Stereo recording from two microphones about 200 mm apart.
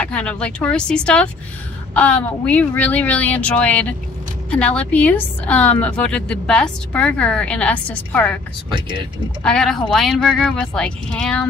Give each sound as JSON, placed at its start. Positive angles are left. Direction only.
{"t": 0.0, "sound": "a woman's voice", "side_deg": 5}
{"t": 8.7, "sound": "speech", "side_deg": -25}
{"t": 9.4, "sound": "a woman's voice", "side_deg": 5}